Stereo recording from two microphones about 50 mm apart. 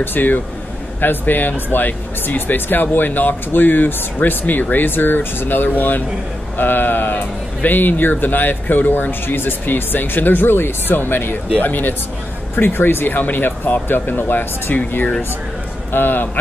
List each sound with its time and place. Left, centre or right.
0.0 s a man's voice: left